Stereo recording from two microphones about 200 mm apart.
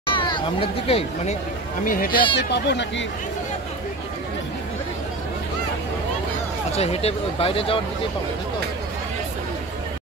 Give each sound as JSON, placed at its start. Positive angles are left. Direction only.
{"t": 0.0, "sound": "speech", "side_deg": 25}
{"t": 1.9, "sound": "speech", "side_deg": 45}
{"t": 2.3, "sound": "speech", "side_deg": 60}
{"t": 6.7, "sound": "speech", "side_deg": 30}